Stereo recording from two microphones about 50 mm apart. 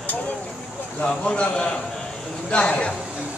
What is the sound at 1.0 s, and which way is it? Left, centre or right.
A man's voice, left.